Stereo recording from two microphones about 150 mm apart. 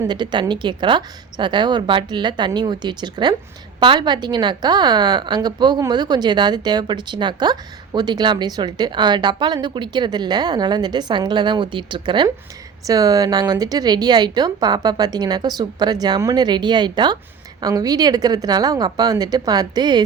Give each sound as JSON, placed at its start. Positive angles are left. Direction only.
{"t": 0.1, "sound": "a woman's voice", "side_deg": -30}